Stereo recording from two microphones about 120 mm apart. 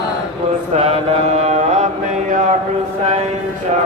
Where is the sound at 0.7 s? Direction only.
55° right (ahead or behind).